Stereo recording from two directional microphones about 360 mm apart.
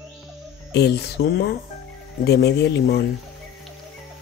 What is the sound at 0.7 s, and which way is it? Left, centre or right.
Speech, left.